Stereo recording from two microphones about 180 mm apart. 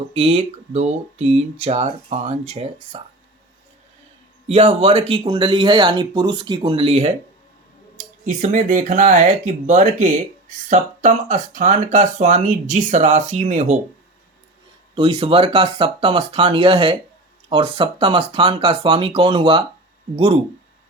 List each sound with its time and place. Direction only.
0.1 s speech: 35° right (ahead or behind)
4.4 s speech: 35° right (ahead or behind)
7.9 s speech: 45° right (ahead or behind)
14.9 s speech: 30° right (ahead or behind)